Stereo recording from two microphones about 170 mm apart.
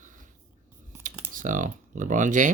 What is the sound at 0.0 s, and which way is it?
Writing, 50° right (ahead or behind).